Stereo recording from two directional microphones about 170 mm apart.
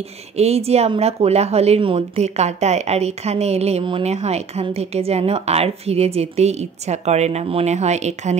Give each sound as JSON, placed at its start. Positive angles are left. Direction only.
{"t": 0.4, "sound": "a woman's voice", "side_deg": -40}